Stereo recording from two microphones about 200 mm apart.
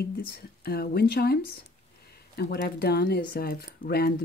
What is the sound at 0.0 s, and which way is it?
Speech, 50° left (ahead or behind).